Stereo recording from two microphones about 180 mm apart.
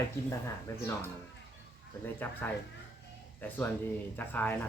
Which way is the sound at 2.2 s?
10° left (ahead or behind).